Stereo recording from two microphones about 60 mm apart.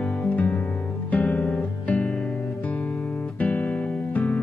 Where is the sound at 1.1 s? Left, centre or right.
Left.